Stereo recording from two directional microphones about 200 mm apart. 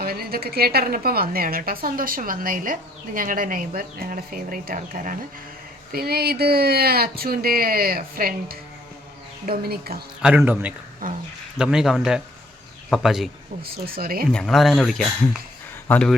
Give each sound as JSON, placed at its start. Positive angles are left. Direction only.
{"t": 0.0, "sound": "a woman's voice", "side_deg": -50}
{"t": 10.2, "sound": "speech", "side_deg": -10}
{"t": 11.0, "sound": "a woman's voice", "side_deg": -45}
{"t": 11.5, "sound": "speech", "side_deg": -5}
{"t": 13.6, "sound": "a woman's voice", "side_deg": -50}
{"t": 14.3, "sound": "speech", "side_deg": 0}